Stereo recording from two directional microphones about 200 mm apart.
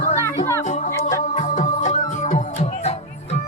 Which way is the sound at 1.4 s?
35° left (ahead or behind).